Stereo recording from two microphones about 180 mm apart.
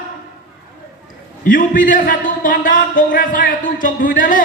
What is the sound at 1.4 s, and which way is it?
A man's voice, 50° left (ahead or behind).